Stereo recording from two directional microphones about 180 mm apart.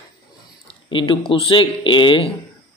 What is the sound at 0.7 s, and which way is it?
Speech, 30° left (ahead or behind).